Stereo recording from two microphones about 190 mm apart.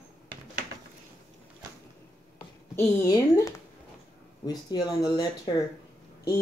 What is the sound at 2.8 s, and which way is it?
A woman's voice, 15° left (ahead or behind).